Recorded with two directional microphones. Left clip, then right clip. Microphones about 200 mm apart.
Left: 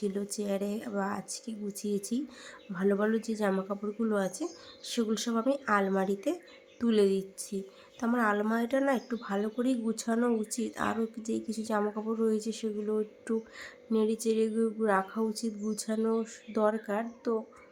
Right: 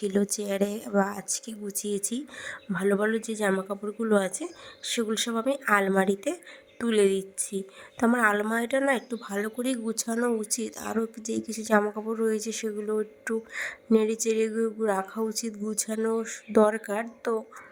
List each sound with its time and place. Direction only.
0.0 s speech: 40° right (ahead or behind)